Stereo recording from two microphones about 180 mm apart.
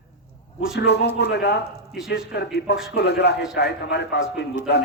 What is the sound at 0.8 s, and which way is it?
Speech, 70° left (ahead or behind).